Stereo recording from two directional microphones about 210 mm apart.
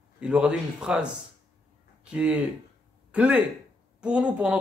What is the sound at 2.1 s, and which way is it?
Speech, 5° right (ahead or behind).